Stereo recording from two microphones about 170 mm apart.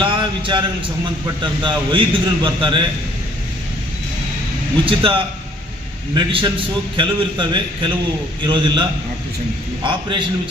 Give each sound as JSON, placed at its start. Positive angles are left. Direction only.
{"t": 0.0, "sound": "a sound", "side_deg": -30}
{"t": 1.4, "sound": "a man's voice", "side_deg": -30}
{"t": 4.9, "sound": "a man's voice", "side_deg": -30}